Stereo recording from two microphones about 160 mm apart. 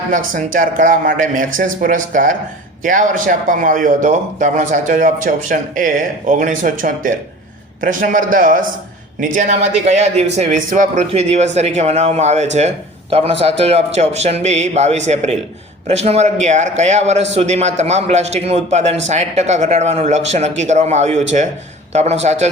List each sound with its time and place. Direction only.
0.1 s a man's voice: 55° right (ahead or behind)